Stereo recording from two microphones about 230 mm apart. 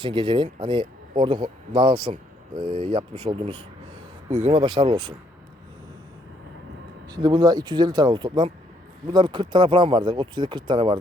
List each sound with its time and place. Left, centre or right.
0.0 s speech: right
4.6 s speech: centre
7.1 s speech: centre